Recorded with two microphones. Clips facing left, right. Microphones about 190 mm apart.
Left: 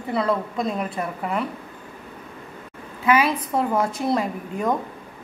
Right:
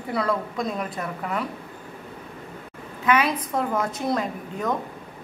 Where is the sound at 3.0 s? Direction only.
5° left (ahead or behind).